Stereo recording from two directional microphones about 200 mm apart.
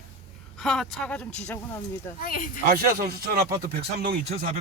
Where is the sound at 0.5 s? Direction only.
Centre (ahead or behind).